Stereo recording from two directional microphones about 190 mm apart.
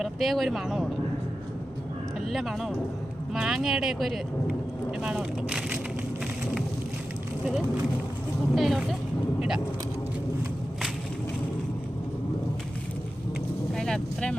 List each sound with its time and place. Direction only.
0.0 s speech: centre (ahead or behind)
2.3 s speech: centre (ahead or behind)
8.5 s speech: centre (ahead or behind)
13.7 s speech: 5° left (ahead or behind)